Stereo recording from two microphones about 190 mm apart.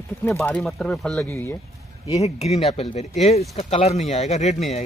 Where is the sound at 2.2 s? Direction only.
35° left (ahead or behind).